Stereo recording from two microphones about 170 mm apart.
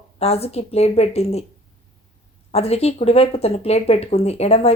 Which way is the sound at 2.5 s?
40° left (ahead or behind).